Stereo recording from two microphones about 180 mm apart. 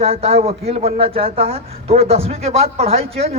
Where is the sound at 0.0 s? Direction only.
35° right (ahead or behind).